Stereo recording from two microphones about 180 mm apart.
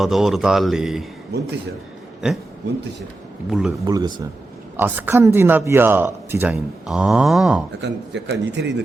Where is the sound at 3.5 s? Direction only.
5° right (ahead or behind).